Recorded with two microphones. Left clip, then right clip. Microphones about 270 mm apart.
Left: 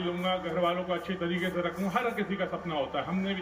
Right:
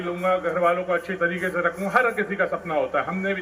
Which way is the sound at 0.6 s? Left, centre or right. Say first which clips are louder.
Right 8 dB; centre.